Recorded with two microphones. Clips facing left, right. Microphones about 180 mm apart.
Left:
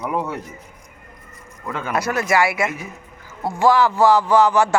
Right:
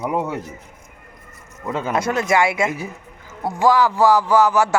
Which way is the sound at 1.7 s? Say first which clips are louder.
Right 2 dB; 25° right (ahead or behind).